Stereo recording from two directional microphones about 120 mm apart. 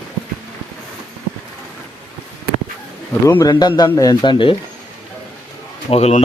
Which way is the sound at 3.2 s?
30° left (ahead or behind).